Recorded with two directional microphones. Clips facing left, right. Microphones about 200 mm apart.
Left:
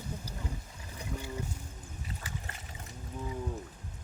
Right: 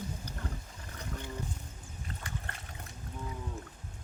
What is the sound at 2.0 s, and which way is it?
Wild animals, 5° left (ahead or behind).